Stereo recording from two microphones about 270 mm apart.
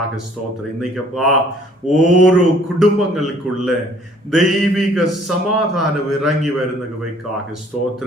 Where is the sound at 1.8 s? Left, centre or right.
Centre.